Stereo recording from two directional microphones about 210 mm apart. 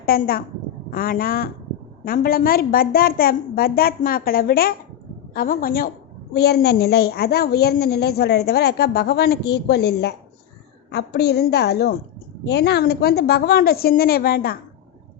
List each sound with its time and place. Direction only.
0.0 s a woman's voice: 45° left (ahead or behind)